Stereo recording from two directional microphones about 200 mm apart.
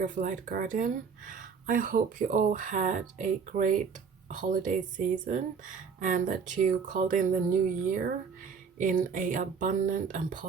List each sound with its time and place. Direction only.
0.0 s speech: 40° right (ahead or behind)